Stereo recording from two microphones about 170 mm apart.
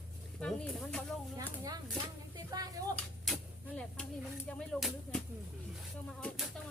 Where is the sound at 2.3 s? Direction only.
20° right (ahead or behind).